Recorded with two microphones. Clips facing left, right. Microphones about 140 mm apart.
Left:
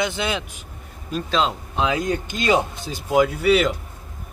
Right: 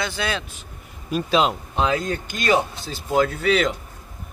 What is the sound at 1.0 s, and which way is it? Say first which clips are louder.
Speech: right 2 dB; 10° right (ahead or behind).